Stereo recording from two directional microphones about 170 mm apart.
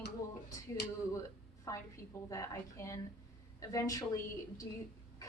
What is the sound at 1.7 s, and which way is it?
A woman's voice, 20° left (ahead or behind).